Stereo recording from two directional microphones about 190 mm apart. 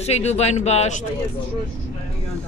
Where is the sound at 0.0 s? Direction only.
35° left (ahead or behind).